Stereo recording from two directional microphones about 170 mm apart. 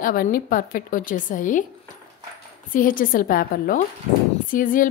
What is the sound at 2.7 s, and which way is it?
A woman's voice, 55° left (ahead or behind).